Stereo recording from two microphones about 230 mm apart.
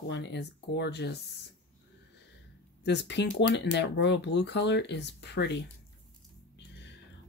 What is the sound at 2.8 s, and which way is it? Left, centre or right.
Speech, left.